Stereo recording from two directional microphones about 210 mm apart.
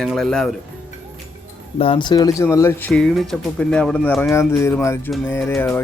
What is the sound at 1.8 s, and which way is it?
Speech, 25° left (ahead or behind).